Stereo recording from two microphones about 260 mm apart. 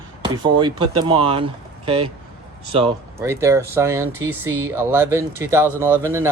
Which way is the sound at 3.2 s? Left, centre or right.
Centre.